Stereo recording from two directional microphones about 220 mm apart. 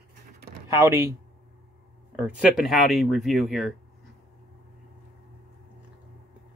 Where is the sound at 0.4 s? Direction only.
45° right (ahead or behind).